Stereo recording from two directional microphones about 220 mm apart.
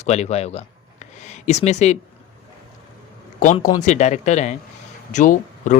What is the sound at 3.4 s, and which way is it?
Speech, 35° left (ahead or behind).